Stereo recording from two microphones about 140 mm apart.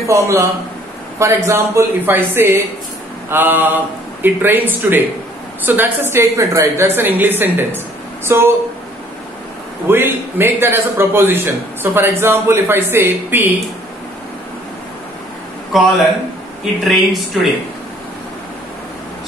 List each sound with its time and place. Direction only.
0.1 s a man's voice: 20° right (ahead or behind)
9.8 s a man's voice: 15° right (ahead or behind)
15.7 s speech: centre (ahead or behind)